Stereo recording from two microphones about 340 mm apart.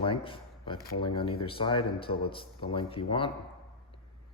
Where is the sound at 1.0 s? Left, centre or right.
Centre.